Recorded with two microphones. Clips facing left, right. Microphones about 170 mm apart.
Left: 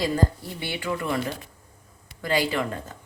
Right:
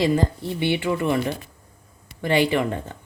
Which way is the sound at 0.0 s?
25° right (ahead or behind).